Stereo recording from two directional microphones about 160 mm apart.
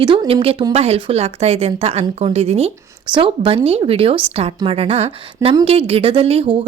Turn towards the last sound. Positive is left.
turn(degrees=-35)  # may be behind; listen again after turning